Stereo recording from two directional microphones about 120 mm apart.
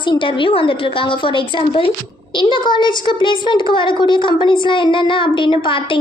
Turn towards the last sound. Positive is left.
turn(degrees=45)  # may be behind; listen again after turning